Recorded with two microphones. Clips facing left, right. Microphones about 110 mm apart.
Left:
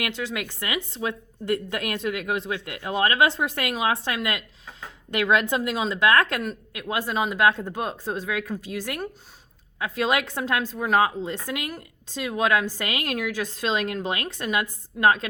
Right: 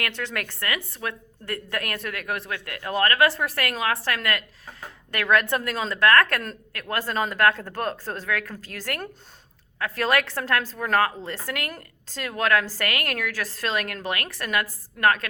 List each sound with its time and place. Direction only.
0.0 s a woman's voice: 10° left (ahead or behind)